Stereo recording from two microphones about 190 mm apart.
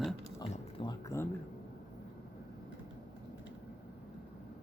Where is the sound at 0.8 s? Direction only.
20° left (ahead or behind).